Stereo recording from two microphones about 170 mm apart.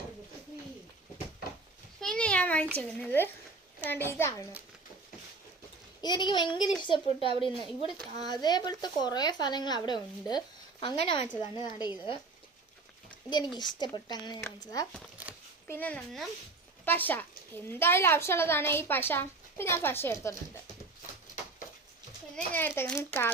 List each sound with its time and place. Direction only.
2.0 s a sound: 5° left (ahead or behind)
2.7 s a woman's voice: 10° left (ahead or behind)
6.0 s speech: 25° left (ahead or behind)
7.6 s speech: 30° right (ahead or behind)
8.3 s speech: 25° left (ahead or behind)
13.3 s speech: 25° left (ahead or behind)
15.7 s a woman's voice: 10° left (ahead or behind)
22.4 s a woman's voice: 10° left (ahead or behind)